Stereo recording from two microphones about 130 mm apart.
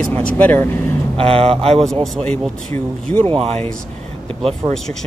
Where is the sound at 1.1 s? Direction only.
50° right (ahead or behind).